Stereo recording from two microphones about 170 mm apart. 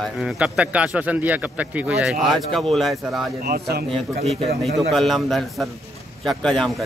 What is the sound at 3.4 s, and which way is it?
Speech, 65° right (ahead or behind).